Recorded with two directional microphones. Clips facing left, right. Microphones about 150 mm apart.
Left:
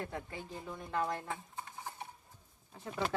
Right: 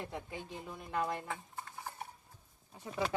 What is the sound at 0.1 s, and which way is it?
Speech, 15° right (ahead or behind).